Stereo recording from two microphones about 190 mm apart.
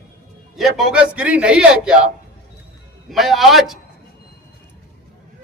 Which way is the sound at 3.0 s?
Centre (ahead or behind).